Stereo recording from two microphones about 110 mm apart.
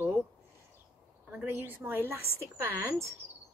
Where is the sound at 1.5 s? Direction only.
20° right (ahead or behind).